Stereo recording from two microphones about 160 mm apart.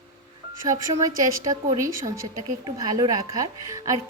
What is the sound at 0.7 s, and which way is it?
Speech, 20° right (ahead or behind).